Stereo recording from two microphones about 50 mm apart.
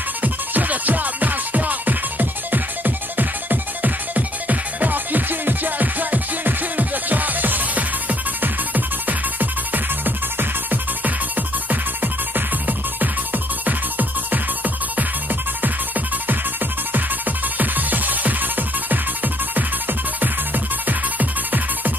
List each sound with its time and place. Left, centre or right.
0.2 s music: right
17.6 s music: right